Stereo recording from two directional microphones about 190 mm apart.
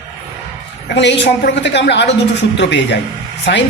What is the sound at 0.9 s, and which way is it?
A woman's voice, 65° left (ahead or behind).